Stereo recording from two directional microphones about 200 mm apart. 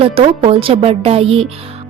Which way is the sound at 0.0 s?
30° right (ahead or behind).